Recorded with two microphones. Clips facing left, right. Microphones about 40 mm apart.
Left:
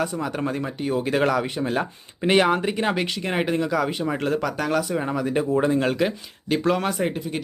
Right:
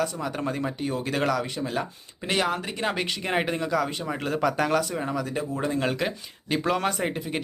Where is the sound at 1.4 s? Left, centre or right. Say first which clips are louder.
Left 4 dB; left.